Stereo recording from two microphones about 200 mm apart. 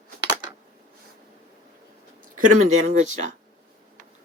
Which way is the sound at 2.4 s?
40° right (ahead or behind).